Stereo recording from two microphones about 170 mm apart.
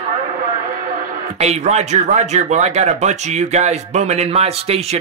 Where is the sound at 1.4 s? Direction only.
40° right (ahead or behind).